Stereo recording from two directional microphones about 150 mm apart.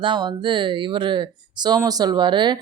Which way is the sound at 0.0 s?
30° right (ahead or behind).